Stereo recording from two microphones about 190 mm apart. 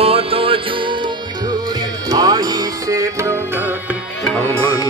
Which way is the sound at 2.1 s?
20° right (ahead or behind).